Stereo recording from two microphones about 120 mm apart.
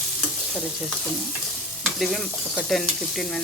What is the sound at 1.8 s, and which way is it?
Stir, centre (ahead or behind).